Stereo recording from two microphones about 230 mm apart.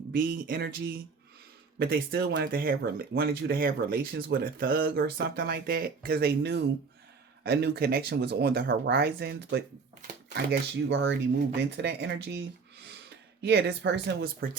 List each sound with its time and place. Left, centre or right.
0.2 s speech: right
1.8 s speech: right
13.4 s speech: right